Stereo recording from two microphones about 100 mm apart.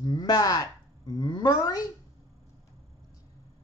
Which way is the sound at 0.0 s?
40° left (ahead or behind).